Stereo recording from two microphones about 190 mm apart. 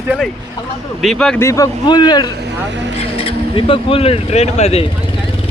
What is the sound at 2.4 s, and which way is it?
Speech, 70° right (ahead or behind).